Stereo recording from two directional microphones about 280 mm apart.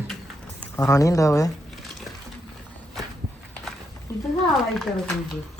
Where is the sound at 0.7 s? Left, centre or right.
Centre.